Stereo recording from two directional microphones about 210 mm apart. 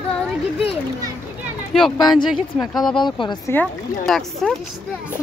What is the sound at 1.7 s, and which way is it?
Speech, centre (ahead or behind).